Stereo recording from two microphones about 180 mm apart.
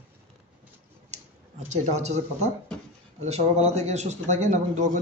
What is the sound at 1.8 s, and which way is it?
Speech, 40° right (ahead or behind).